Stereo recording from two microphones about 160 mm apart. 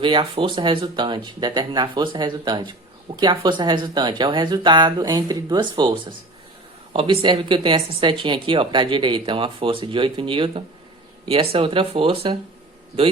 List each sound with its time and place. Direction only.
0.0 s speech: 30° right (ahead or behind)